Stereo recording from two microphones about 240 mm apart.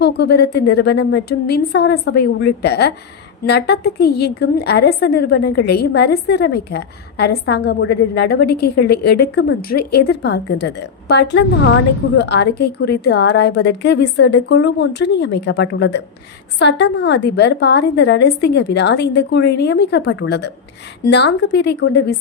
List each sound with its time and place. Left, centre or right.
0.0 s a woman's voice: left